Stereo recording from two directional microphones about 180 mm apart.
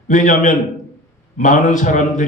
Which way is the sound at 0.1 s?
45° left (ahead or behind).